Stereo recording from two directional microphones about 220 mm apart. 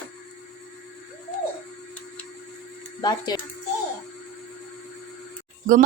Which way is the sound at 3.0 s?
20° left (ahead or behind).